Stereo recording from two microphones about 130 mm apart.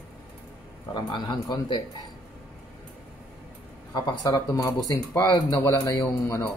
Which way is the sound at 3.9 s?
30° left (ahead or behind).